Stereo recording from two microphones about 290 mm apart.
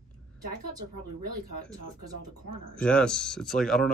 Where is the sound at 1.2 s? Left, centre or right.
Right.